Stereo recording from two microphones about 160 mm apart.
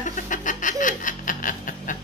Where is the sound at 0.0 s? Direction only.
50° left (ahead or behind).